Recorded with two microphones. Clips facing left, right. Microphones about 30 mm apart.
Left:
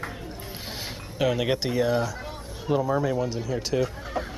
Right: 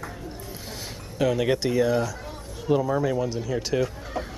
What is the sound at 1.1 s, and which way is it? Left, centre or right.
Speech, centre.